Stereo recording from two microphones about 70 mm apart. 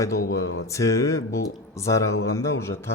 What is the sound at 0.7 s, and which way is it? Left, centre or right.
Speech, left.